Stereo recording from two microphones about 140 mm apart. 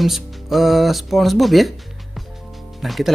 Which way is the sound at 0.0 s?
Centre (ahead or behind).